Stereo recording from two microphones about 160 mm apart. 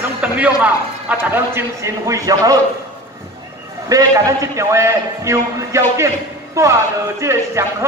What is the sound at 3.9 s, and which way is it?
A man's voice, 20° right (ahead or behind).